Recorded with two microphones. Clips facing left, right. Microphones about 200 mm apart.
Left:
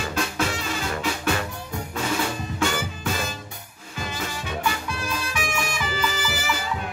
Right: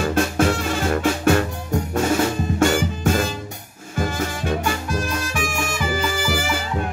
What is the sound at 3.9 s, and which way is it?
Music, 50° right (ahead or behind).